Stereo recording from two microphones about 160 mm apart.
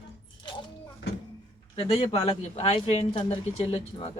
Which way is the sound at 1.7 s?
40° left (ahead or behind).